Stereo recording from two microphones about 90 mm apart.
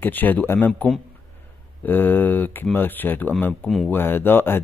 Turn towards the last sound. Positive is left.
turn(degrees=25)  # may be behind; listen again after turning